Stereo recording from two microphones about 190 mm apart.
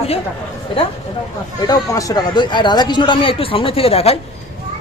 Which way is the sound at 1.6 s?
20° left (ahead or behind).